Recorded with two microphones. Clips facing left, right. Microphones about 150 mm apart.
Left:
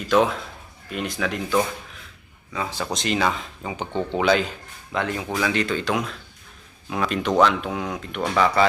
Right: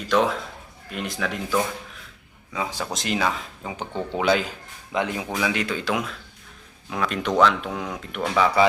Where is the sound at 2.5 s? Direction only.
5° right (ahead or behind).